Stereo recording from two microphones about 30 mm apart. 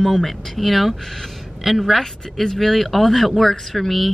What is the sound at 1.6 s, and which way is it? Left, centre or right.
Speech, centre.